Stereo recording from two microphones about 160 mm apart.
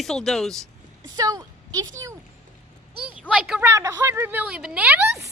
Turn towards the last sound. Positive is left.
turn(degrees=-15)  # may be behind; listen again after turning